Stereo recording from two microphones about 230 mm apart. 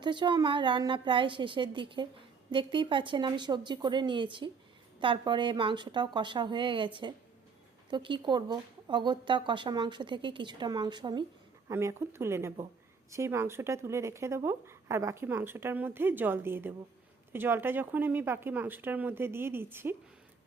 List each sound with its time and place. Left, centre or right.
0.0 s speech: centre